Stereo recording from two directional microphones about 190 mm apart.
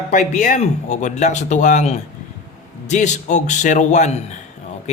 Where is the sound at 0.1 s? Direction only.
40° left (ahead or behind).